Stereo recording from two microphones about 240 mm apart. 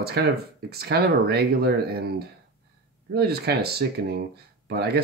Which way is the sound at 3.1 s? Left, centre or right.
Right.